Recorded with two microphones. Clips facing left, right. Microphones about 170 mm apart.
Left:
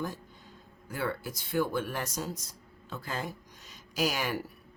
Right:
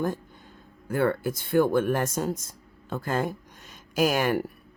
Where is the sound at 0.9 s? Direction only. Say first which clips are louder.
Right 10 dB; 55° right (ahead or behind).